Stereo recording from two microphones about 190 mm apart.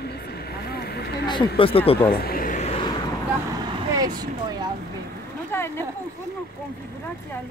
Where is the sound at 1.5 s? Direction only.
30° left (ahead or behind).